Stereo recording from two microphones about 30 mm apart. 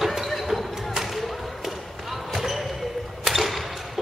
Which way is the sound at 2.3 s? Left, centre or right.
Centre.